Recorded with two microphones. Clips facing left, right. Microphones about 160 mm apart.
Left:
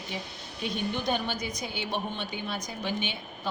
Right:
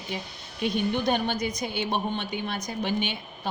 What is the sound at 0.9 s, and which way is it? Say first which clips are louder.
Speech: right 4 dB; 55° right (ahead or behind).